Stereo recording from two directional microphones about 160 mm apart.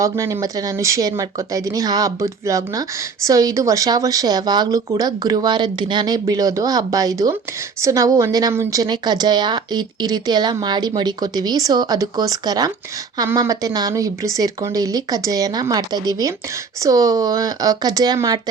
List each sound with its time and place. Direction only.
0.0 s speech: 20° right (ahead or behind)